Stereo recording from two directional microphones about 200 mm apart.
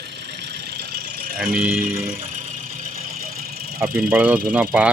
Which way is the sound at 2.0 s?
45° right (ahead or behind).